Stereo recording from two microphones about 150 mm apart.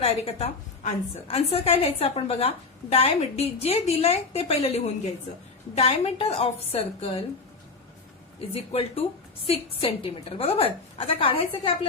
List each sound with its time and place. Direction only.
0.0 s a woman's voice: 40° left (ahead or behind)
8.4 s a woman's voice: 40° left (ahead or behind)